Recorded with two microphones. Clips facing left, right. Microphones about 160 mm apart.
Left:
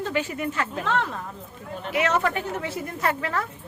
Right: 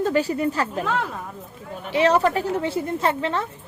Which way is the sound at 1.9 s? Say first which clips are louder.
Right 5 dB; 30° right (ahead or behind).